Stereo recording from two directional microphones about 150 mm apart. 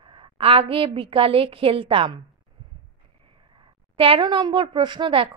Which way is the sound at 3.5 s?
35° right (ahead or behind).